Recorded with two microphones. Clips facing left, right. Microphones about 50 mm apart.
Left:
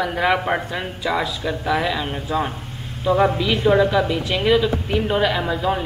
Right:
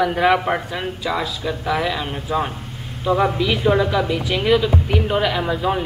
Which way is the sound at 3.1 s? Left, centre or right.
Left.